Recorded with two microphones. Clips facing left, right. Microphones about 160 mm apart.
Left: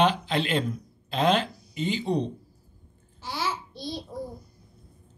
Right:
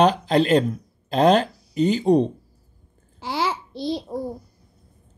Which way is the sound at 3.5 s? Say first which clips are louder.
Right 7 dB; 90° right.